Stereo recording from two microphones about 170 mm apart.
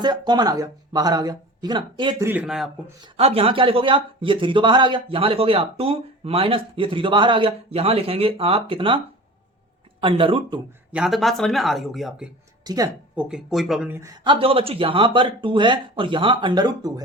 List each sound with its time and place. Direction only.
0.0 s speech: 25° right (ahead or behind)
2.1 s speech: 10° right (ahead or behind)
3.2 s speech: 35° right (ahead or behind)
10.0 s speech: 30° right (ahead or behind)
10.9 s speech: centre (ahead or behind)
12.6 s speech: 20° right (ahead or behind)
13.1 s speech: 5° right (ahead or behind)
13.9 s speech: 20° right (ahead or behind)
14.3 s speech: 30° right (ahead or behind)